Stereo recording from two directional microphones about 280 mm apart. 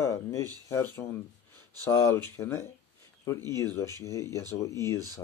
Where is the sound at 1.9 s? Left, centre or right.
Centre.